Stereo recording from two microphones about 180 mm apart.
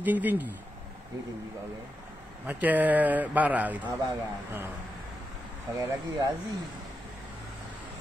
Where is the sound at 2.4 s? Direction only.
10° right (ahead or behind).